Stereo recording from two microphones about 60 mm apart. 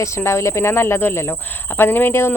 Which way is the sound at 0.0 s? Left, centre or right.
Left.